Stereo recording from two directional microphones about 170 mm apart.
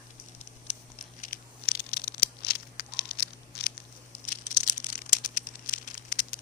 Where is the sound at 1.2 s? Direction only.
60° left (ahead or behind).